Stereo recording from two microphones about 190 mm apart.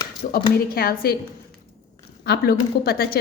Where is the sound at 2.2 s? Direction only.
55° left (ahead or behind).